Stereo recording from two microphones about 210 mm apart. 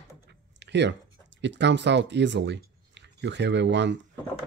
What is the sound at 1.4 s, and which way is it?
Speech, 55° right (ahead or behind).